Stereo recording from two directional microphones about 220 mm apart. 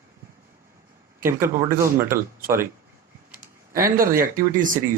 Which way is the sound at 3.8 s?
40° right (ahead or behind).